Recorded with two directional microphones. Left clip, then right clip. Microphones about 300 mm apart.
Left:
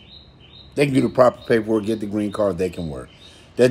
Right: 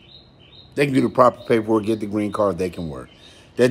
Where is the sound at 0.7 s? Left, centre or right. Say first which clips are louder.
Even; centre.